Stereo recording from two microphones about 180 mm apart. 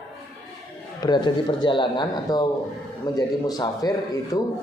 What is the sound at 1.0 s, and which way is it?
Speech, 25° left (ahead or behind).